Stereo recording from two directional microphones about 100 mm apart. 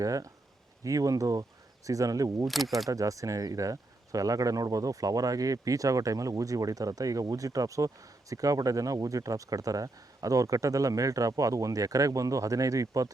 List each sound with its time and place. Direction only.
0.0 s speech: 35° right (ahead or behind)
2.5 s speech: centre (ahead or behind)
2.9 s speech: 35° right (ahead or behind)